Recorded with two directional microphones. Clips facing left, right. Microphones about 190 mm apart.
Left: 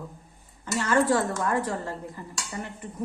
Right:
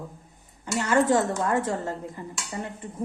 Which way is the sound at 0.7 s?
15° right (ahead or behind).